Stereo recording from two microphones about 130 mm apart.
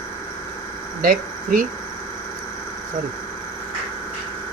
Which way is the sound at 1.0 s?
90° right.